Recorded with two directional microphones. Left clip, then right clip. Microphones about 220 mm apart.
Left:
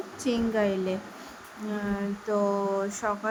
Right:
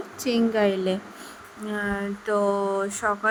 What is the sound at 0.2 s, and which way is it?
Speech, 20° right (ahead or behind).